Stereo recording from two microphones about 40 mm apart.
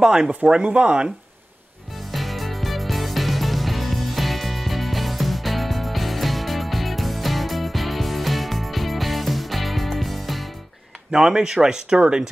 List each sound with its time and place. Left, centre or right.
0.0 s speech: centre
0.3 s speech: right
2.0 s music: centre
11.1 s speech: centre